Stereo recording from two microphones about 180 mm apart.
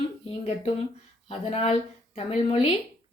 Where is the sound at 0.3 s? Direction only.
30° left (ahead or behind).